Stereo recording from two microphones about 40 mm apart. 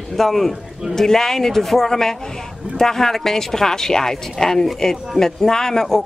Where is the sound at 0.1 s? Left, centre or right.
Centre.